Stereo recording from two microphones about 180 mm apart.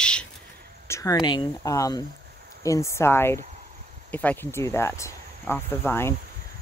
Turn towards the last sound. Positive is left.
turn(degrees=10)  # may be behind; listen again after turning